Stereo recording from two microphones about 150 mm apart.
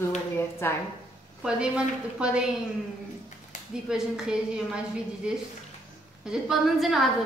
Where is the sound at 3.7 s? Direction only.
5° right (ahead or behind).